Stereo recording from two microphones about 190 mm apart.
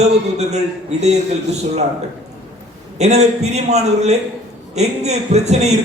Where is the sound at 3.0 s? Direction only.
35° right (ahead or behind).